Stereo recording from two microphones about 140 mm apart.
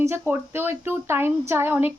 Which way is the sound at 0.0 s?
15° right (ahead or behind).